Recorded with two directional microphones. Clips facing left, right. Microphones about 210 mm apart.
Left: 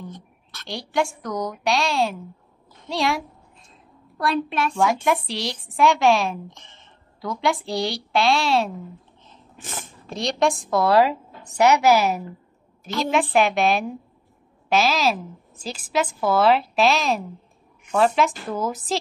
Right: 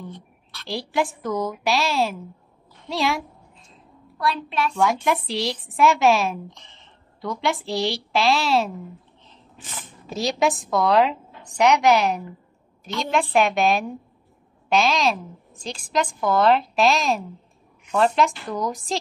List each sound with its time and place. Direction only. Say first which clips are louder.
0.1 s a sound: even; 45° left (ahead or behind)
0.7 s a woman's voice: even; centre (ahead or behind)
4.2 s a woman's voice: left 2 dB; 50° left (ahead or behind)
4.7 s a woman's voice: left 1 dB; centre (ahead or behind)
9.6 s speech: left 4 dB; 45° left (ahead or behind)
10.0 s a woman's voice: even; centre (ahead or behind)